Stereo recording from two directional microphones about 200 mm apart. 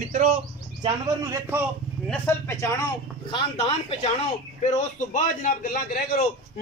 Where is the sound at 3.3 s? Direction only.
30° left (ahead or behind); by 6.2 s 45° left (ahead or behind).